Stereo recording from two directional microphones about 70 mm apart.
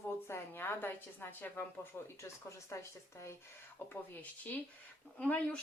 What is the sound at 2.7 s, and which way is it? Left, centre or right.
Speech, left.